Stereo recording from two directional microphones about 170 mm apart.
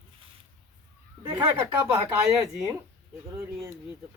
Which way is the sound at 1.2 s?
25° right (ahead or behind).